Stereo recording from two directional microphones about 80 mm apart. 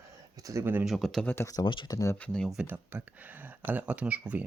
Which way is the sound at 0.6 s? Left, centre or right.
Right.